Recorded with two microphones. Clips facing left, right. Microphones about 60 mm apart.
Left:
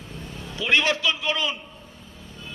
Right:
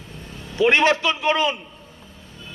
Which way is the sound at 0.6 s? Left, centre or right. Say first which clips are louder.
Right 6 dB; right.